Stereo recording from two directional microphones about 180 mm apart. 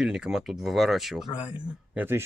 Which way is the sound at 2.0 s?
15° right (ahead or behind).